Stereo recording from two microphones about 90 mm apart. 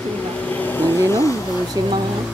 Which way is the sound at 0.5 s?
20° left (ahead or behind).